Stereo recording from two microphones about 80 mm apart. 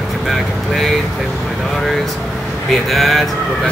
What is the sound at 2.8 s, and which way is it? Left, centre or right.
Speech, centre.